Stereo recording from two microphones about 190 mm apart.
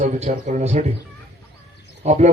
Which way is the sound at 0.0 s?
35° right (ahead or behind).